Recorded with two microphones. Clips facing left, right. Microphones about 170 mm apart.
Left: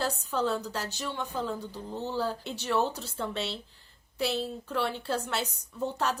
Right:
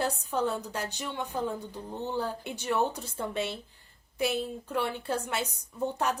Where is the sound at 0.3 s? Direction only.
15° right (ahead or behind).